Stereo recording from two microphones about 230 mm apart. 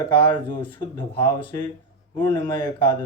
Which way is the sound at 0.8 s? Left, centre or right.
Centre.